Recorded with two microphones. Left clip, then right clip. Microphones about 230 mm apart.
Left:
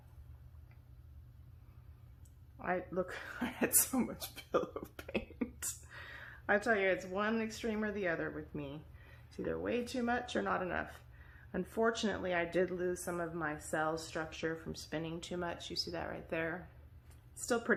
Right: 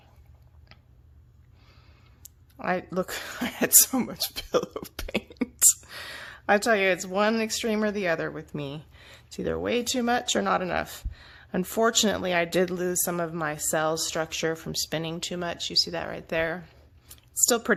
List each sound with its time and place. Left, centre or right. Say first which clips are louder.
2.6 s a woman's voice: right 9 dB; right